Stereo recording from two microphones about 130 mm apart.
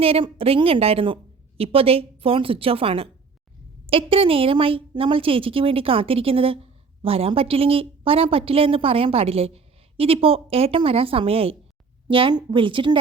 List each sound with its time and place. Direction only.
0.0 s a woman's voice: 45° right (ahead or behind)